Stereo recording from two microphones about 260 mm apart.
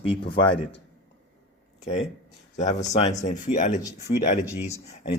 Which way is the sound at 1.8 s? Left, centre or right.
Left.